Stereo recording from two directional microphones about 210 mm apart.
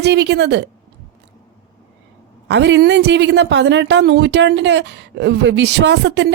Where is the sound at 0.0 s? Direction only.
55° right (ahead or behind).